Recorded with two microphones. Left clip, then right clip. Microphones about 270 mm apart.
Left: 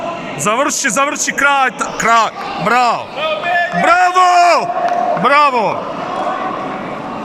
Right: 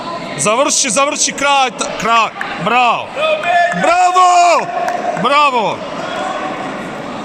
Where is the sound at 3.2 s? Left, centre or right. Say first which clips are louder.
Right 3 dB; right.